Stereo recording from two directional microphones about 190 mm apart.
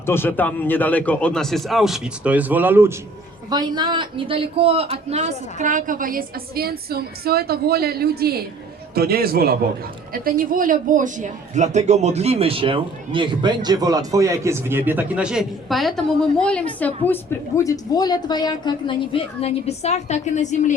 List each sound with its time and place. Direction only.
0.0 s a man's voice: 10° left (ahead or behind); by 2.9 s 10° right (ahead or behind)
3.5 s a man's voice: 20° right (ahead or behind); by 20.7 s 40° left (ahead or behind)